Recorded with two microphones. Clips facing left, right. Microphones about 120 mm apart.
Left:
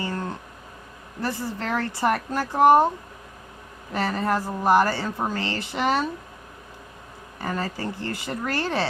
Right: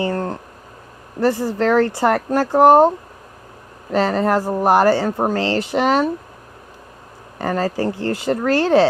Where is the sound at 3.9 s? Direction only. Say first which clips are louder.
Right 8 dB; 75° right (ahead or behind).